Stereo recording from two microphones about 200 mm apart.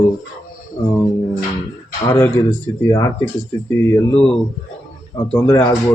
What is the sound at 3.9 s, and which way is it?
Speech, 5° left (ahead or behind).